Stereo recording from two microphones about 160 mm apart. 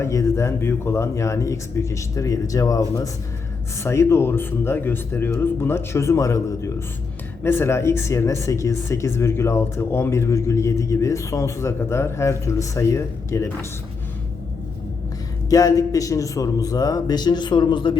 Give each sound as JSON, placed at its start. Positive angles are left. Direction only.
{"t": 0.0, "sound": "speech", "side_deg": 20}
{"t": 15.4, "sound": "speech", "side_deg": 20}